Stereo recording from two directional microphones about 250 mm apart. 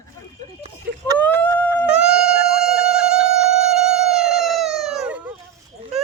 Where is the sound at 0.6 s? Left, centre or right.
Centre.